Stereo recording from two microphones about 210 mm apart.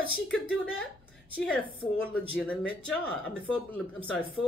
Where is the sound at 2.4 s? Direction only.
5° left (ahead or behind).